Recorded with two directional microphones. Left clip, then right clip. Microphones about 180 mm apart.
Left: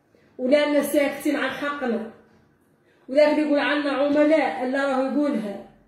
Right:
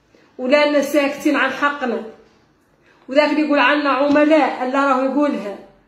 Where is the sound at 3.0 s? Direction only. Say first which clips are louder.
Right 3 dB; centre (ahead or behind).